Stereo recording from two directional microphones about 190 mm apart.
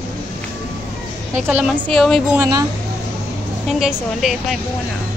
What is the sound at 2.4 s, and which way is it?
Speech, 20° right (ahead or behind).